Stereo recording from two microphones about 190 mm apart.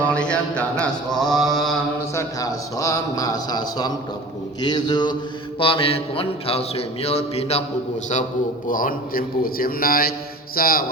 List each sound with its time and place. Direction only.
0.0 s mantra: 5° left (ahead or behind)
2.1 s a man's voice: 20° left (ahead or behind)
5.5 s mantra: 30° left (ahead or behind)
8.6 s a man's voice: 45° left (ahead or behind)